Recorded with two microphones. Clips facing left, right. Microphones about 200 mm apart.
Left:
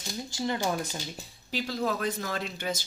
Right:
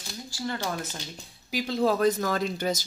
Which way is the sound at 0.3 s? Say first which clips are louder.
Left 2 dB; 20° left (ahead or behind).